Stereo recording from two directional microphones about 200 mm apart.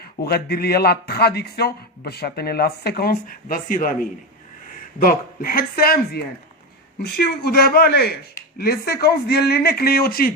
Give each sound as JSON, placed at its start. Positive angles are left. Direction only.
{"t": 0.0, "sound": "speech", "side_deg": 50}
{"t": 4.9, "sound": "speech", "side_deg": 45}